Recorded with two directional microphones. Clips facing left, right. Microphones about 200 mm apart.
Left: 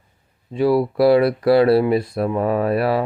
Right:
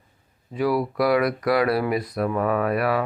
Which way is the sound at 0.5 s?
25° left (ahead or behind).